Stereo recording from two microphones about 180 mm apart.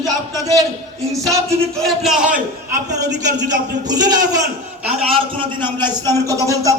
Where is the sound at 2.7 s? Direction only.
20° right (ahead or behind).